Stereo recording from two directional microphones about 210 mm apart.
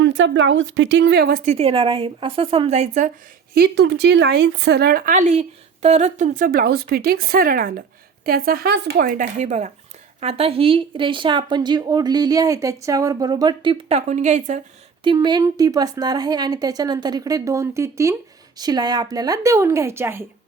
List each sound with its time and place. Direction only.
0.0 s a woman's voice: 60° right (ahead or behind)
1.5 s speech: 30° right (ahead or behind)
3.5 s speech: 50° right (ahead or behind); by 14.6 s 35° right (ahead or behind)
15.0 s a woman's voice: 20° right (ahead or behind)